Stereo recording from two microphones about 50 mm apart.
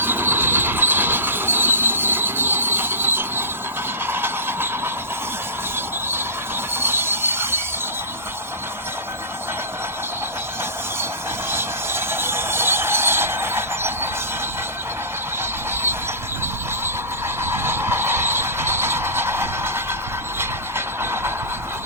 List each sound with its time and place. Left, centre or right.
0.0 s train: right
6.7 s train: right
11.5 s a sound: right
17.4 s vehicle: right